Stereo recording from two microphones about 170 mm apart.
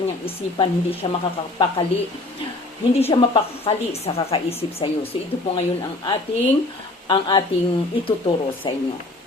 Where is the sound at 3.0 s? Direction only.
35° left (ahead or behind).